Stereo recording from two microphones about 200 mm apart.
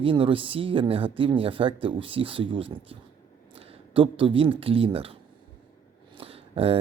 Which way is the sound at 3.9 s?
25° right (ahead or behind).